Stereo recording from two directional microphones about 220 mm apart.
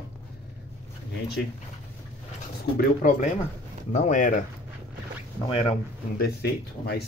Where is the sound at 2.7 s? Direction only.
35° left (ahead or behind).